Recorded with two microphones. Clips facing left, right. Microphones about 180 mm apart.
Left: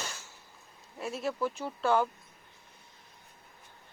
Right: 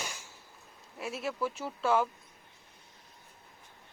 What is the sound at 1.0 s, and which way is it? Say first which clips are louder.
Speech: left 2 dB; centre (ahead or behind).